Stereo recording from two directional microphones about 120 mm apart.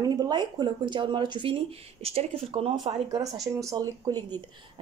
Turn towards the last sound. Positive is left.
turn(degrees=-30)  # may be behind; listen again after turning